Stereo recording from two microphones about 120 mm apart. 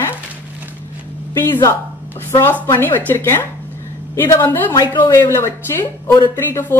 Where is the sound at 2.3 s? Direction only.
20° left (ahead or behind).